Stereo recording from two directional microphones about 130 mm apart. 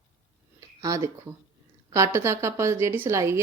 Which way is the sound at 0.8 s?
25° right (ahead or behind).